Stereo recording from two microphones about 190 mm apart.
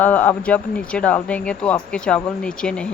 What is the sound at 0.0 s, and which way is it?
Speech, 10° left (ahead or behind).